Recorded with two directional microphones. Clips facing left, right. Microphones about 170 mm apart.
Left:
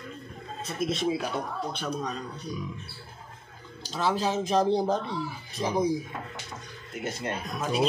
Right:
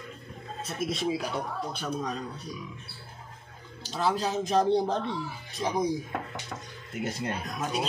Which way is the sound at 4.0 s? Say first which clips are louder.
Left 1 dB; centre (ahead or behind).